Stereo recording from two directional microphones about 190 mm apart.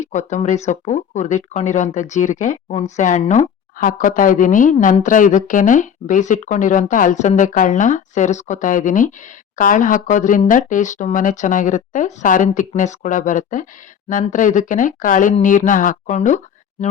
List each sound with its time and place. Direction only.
0.0 s speech: 40° left (ahead or behind)